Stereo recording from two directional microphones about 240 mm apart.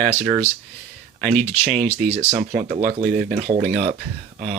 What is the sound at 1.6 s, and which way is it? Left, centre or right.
Speech, right.